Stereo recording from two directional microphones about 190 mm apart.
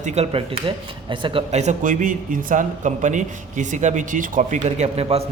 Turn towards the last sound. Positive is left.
turn(degrees=-30)  # may be behind; listen again after turning